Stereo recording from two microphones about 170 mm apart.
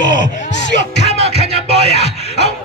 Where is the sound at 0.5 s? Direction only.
45° left (ahead or behind).